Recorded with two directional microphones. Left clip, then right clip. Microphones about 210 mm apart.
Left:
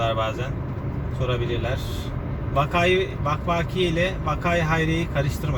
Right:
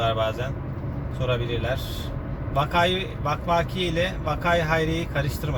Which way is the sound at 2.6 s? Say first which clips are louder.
Left 2 dB; 30° right (ahead or behind).